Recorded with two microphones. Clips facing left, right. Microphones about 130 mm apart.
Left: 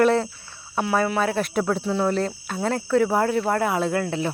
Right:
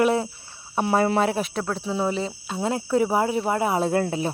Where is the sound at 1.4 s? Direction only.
Centre (ahead or behind).